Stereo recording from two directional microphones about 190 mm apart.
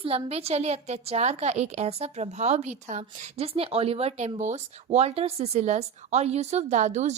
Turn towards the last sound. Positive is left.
turn(degrees=-40)  # may be behind; listen again after turning